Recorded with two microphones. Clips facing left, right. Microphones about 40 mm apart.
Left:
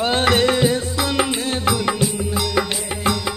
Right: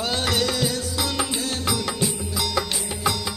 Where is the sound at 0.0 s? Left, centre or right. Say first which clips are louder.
Left 7 dB; left.